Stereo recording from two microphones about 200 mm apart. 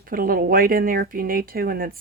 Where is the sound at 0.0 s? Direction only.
45° right (ahead or behind).